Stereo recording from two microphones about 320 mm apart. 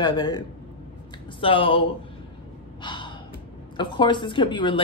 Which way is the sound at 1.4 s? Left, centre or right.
Centre.